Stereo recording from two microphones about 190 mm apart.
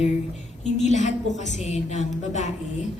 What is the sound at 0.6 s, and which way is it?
A woman's voice, 35° left (ahead or behind).